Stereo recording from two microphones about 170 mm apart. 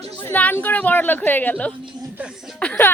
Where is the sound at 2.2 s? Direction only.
5° right (ahead or behind).